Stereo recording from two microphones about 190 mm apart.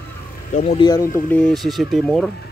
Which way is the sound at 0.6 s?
35° left (ahead or behind).